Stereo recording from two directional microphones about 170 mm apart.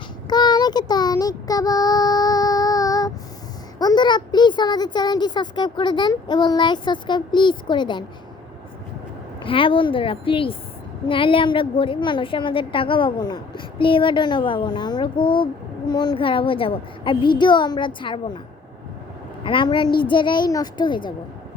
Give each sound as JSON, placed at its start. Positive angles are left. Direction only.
{"t": 0.3, "sound": "child singing", "side_deg": 25}
{"t": 3.8, "sound": "a woman's voice", "side_deg": 25}
{"t": 9.4, "sound": "a woman's voice", "side_deg": 30}
{"t": 19.5, "sound": "a woman's voice", "side_deg": 30}